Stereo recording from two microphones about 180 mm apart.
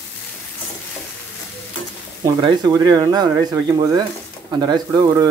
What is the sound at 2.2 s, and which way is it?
Speech, 20° right (ahead or behind).